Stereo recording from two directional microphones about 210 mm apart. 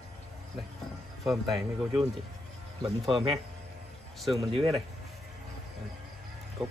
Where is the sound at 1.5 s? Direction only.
15° right (ahead or behind).